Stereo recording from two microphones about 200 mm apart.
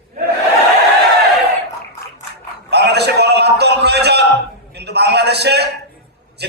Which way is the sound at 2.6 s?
55° right (ahead or behind).